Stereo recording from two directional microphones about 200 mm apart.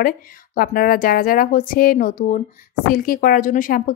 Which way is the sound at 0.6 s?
45° left (ahead or behind).